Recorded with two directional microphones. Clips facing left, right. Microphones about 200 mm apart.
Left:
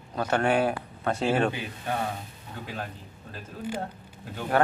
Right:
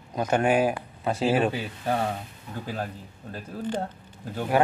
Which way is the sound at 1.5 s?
35° right (ahead or behind).